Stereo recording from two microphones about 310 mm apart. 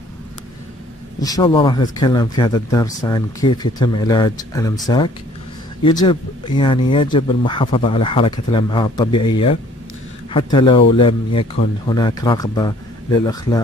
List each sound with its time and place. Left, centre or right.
1.2 s speech: centre